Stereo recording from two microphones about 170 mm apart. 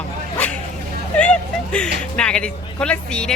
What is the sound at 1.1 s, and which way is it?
Speech, 5° left (ahead or behind).